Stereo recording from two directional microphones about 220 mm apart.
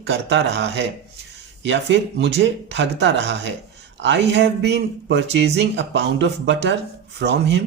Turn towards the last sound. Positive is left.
turn(degrees=-50)  # may be behind; listen again after turning